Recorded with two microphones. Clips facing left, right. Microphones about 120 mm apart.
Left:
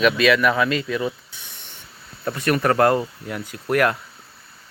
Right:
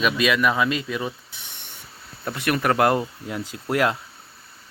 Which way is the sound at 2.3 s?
10° right (ahead or behind).